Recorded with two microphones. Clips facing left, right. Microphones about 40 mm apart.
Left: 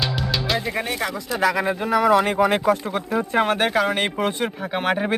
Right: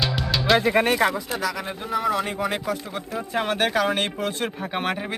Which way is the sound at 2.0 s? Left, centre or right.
Left.